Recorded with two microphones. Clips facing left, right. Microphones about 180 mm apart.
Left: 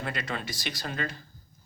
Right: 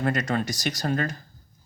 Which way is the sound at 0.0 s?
45° right (ahead or behind).